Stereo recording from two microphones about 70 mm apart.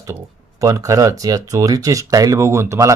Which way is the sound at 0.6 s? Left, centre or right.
Right.